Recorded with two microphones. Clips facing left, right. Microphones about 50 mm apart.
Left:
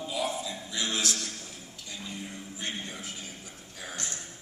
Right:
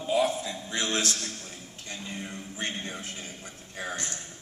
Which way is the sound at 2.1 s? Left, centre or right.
Right.